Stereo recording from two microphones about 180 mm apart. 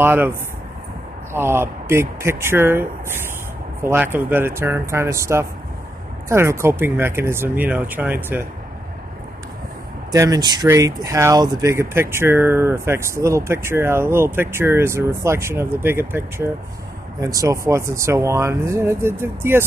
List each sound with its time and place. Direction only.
0.0 s speech: 10° right (ahead or behind)
10.1 s speech: 15° right (ahead or behind)